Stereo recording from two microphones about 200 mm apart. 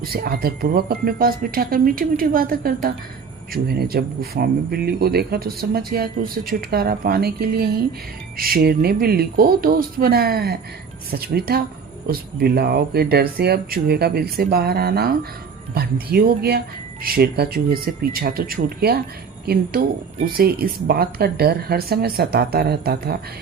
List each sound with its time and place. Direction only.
0.0 s speech: 50° right (ahead or behind)
20.3 s speech: 50° right (ahead or behind)